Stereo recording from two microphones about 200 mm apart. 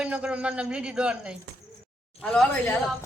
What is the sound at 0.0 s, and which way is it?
A man's voice, 5° right (ahead or behind).